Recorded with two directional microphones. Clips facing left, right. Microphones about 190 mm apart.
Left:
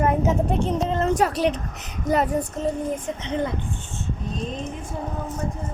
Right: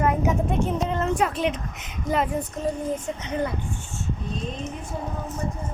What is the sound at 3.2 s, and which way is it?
Child singing, 20° left (ahead or behind).